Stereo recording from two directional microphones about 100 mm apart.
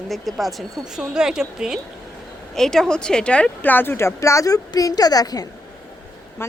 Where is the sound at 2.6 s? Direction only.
5° left (ahead or behind); by 5.5 s 40° left (ahead or behind).